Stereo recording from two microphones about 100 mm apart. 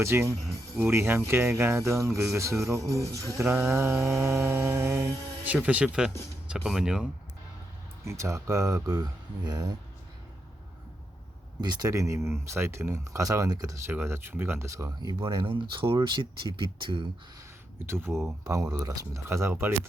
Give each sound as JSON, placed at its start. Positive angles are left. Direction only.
{"t": 0.0, "sound": "music", "side_deg": -25}
{"t": 5.5, "sound": "speech", "side_deg": -15}
{"t": 8.0, "sound": "speech", "side_deg": -30}
{"t": 11.6, "sound": "speech", "side_deg": -40}
{"t": 13.8, "sound": "music", "side_deg": -25}
{"t": 15.0, "sound": "speech", "side_deg": -50}
{"t": 17.8, "sound": "music", "side_deg": -25}
{"t": 18.4, "sound": "music", "side_deg": -35}